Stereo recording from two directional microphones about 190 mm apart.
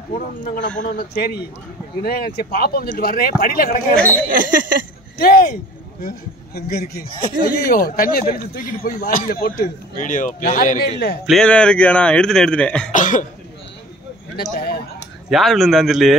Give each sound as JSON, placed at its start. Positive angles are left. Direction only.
{"t": 0.1, "sound": "a man's voice", "side_deg": 40}
{"t": 3.9, "sound": "speech", "side_deg": 5}
{"t": 4.3, "sound": "a sound", "side_deg": -45}
{"t": 5.2, "sound": "a man's voice", "side_deg": 50}
{"t": 11.2, "sound": "speech", "side_deg": 5}
{"t": 12.9, "sound": "a man's voice", "side_deg": 45}
{"t": 14.3, "sound": "speech", "side_deg": 55}
{"t": 15.2, "sound": "speech", "side_deg": 0}